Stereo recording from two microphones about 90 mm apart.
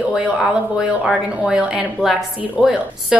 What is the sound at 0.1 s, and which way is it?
A woman's voice, 5° right (ahead or behind).